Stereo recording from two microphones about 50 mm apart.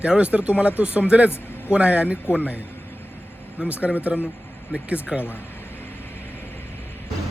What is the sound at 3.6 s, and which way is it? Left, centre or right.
Speech, right.